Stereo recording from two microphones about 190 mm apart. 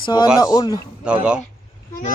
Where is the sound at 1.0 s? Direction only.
5° right (ahead or behind).